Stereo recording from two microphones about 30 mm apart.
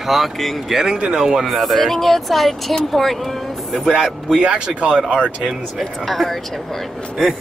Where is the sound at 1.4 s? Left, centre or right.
Centre.